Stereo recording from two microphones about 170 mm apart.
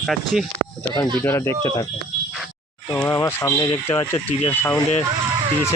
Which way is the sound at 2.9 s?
15° left (ahead or behind).